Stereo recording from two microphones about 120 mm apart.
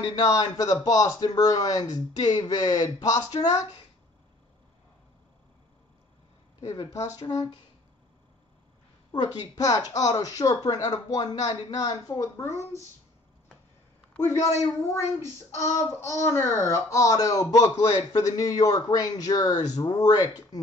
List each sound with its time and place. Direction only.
0.1 s speech: 30° left (ahead or behind)
6.9 s speech: 30° left (ahead or behind)
9.1 s speech: 35° left (ahead or behind)
14.2 s a man's voice: 25° left (ahead or behind)